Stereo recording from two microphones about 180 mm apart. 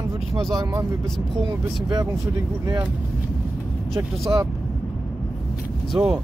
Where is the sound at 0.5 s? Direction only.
20° right (ahead or behind).